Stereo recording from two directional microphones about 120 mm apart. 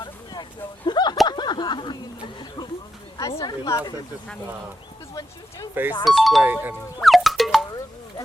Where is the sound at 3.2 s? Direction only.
30° left (ahead or behind).